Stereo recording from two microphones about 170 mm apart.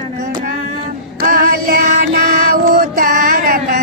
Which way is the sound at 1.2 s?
55° right (ahead or behind).